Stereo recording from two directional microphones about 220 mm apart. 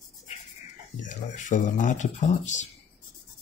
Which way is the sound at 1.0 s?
35° left (ahead or behind).